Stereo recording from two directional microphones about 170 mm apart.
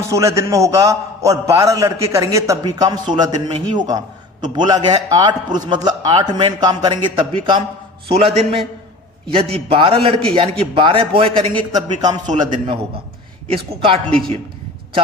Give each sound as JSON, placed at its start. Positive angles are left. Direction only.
{"t": 0.1, "sound": "a man's voice", "side_deg": -15}